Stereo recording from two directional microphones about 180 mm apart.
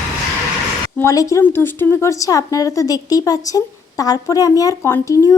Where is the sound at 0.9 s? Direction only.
15° left (ahead or behind).